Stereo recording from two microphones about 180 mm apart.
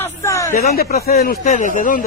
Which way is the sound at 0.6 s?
55° left (ahead or behind).